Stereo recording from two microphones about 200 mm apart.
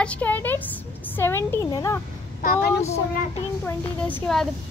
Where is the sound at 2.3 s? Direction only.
40° left (ahead or behind).